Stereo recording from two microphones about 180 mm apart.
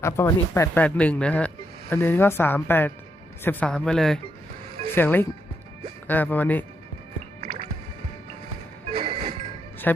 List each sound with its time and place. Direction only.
0.0 s speech: 15° left (ahead or behind)
9.0 s music: 30° right (ahead or behind)
9.9 s speech: 10° left (ahead or behind)